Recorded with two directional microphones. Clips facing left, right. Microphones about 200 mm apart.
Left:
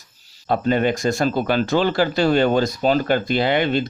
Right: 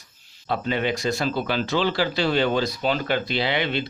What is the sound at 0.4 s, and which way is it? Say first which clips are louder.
Speech: left 6 dB; 45° left (ahead or behind).